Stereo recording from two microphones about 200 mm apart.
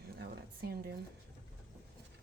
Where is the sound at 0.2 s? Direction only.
50° right (ahead or behind).